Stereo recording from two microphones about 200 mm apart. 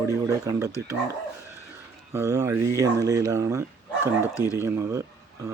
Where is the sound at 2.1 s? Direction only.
15° right (ahead or behind).